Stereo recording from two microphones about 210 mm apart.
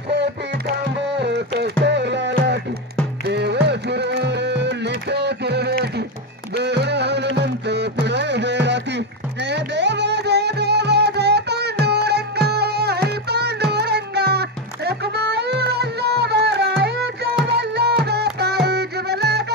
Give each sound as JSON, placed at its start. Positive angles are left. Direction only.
{"t": 0.1, "sound": "music", "side_deg": -50}